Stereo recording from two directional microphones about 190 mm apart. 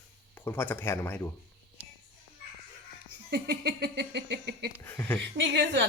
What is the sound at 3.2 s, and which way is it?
A woman's voice, 60° right (ahead or behind).